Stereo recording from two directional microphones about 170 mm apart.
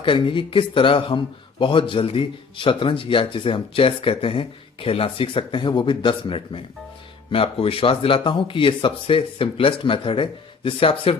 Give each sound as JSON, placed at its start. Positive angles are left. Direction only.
{"t": 0.0, "sound": "speech", "side_deg": 30}